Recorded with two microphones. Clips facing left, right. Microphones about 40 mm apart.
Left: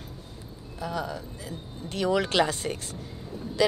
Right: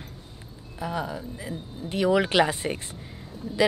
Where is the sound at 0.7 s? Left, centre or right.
Centre.